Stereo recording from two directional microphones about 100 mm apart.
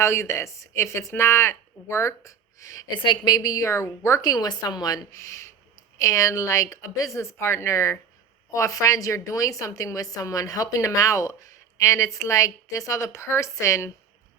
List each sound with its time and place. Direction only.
0.0 s speech: 30° left (ahead or behind)
2.9 s a woman's voice: 55° left (ahead or behind); by 4.2 s 30° left (ahead or behind)
4.2 s a woman's voice: 40° left (ahead or behind)